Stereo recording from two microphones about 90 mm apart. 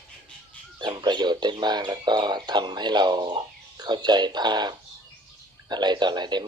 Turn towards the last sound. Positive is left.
turn(degrees=-55)  # may be behind; listen again after turning